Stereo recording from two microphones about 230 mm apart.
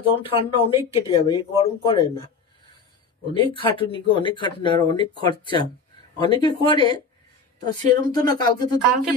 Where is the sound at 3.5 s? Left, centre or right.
Left.